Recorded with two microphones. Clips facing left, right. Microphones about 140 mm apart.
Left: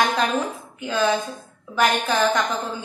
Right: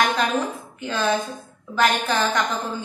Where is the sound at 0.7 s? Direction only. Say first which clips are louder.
Left 2 dB; 10° left (ahead or behind).